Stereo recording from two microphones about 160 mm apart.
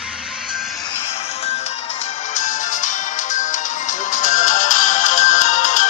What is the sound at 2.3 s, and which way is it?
Music, 50° left (ahead or behind).